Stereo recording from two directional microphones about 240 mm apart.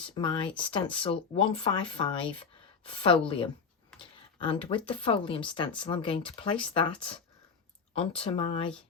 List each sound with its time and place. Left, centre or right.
0.1 s speech: left